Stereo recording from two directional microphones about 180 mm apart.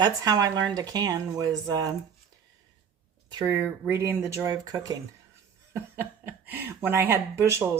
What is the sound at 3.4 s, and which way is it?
A woman's voice, 10° right (ahead or behind).